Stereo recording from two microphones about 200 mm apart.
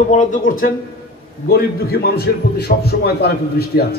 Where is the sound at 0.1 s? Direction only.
40° left (ahead or behind).